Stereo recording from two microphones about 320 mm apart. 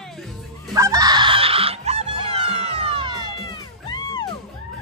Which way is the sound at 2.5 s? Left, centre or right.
Centre.